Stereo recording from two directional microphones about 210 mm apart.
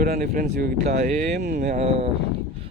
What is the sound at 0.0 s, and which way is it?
Speech, 45° right (ahead or behind).